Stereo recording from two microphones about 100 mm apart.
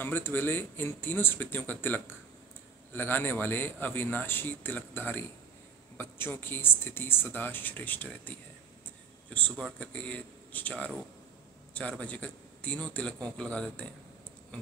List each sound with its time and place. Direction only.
0.0 s speech: 20° left (ahead or behind)
9.8 s a man's voice: 15° left (ahead or behind)